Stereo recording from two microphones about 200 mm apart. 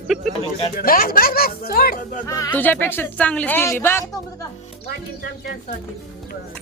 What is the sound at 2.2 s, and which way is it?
A woman's voice, 15° left (ahead or behind).